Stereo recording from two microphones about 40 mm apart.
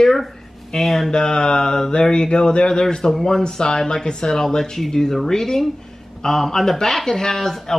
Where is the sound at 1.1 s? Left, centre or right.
Centre.